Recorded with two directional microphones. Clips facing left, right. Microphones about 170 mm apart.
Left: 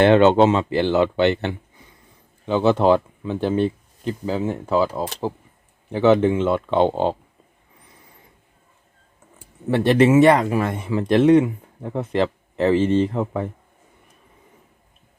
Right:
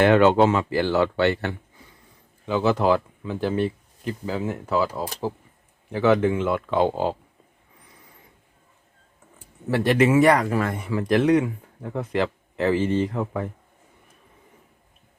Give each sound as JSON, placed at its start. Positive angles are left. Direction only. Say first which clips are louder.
{"t": 0.0, "sound": "speech", "louder": "left 3 dB", "side_deg": 25}
{"t": 5.9, "sound": "speech", "louder": "left 3 dB", "side_deg": 25}
{"t": 9.6, "sound": "speech", "louder": "left 4 dB", "side_deg": 25}